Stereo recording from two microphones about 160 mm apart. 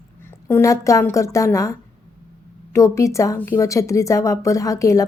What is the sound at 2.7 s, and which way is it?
A woman's voice, 20° left (ahead or behind).